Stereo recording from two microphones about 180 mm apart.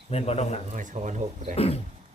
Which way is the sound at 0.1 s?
35° left (ahead or behind).